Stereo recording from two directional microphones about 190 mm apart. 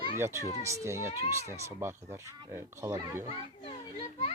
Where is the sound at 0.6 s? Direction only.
15° right (ahead or behind).